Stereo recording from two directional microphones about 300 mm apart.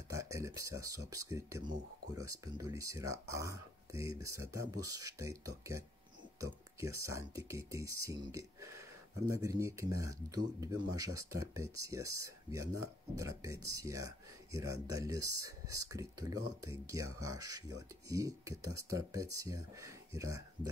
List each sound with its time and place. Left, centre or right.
0.1 s speech: centre